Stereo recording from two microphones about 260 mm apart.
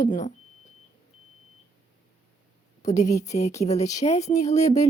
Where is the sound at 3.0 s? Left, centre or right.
Left.